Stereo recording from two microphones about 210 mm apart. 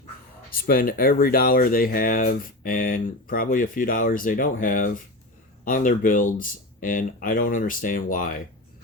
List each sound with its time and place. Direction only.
0.6 s speech: 45° left (ahead or behind)